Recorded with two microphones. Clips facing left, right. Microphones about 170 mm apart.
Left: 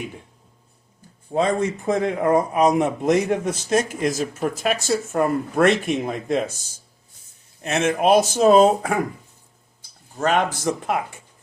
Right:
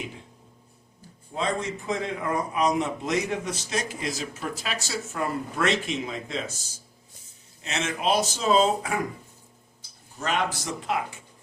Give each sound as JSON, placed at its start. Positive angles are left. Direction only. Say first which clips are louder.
{"t": 1.3, "sound": "speech", "louder": "left 8 dB", "side_deg": 50}
{"t": 7.6, "sound": "speech", "louder": "left 9 dB", "side_deg": 55}
{"t": 10.2, "sound": "speech", "louder": "left 7 dB", "side_deg": 55}